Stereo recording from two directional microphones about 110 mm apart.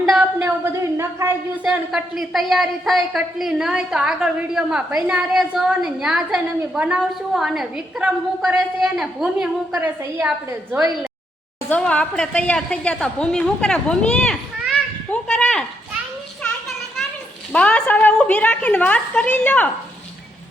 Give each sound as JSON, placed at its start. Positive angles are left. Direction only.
{"t": 0.0, "sound": "a sound", "side_deg": -10}
{"t": 1.6, "sound": "a woman's voice", "side_deg": -10}
{"t": 9.8, "sound": "a woman's voice", "side_deg": -20}
{"t": 11.7, "sound": "a woman's voice", "side_deg": 10}
{"t": 14.7, "sound": "children playing", "side_deg": 10}
{"t": 17.5, "sound": "a woman's voice", "side_deg": 10}